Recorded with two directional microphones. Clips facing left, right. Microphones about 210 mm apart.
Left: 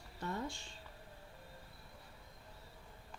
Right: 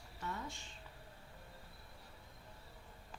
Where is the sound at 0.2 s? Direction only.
35° left (ahead or behind).